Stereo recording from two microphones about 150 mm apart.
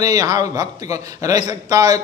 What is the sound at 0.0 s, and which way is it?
Speech, 25° right (ahead or behind).